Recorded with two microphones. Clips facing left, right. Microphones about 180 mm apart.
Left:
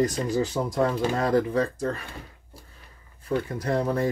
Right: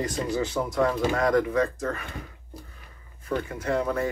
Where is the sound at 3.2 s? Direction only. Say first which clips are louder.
Left 2 dB; 35° left (ahead or behind).